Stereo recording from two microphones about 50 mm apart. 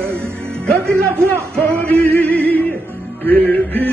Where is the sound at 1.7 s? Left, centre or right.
Left.